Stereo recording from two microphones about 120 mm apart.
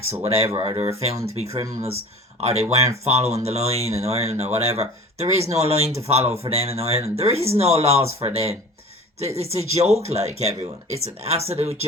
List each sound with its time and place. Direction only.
0.2 s speech: 60° right (ahead or behind)